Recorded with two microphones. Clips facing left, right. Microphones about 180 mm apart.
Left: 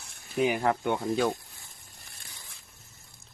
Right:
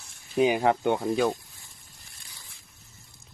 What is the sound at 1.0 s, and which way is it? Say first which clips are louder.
Speech: right 2 dB; 10° right (ahead or behind).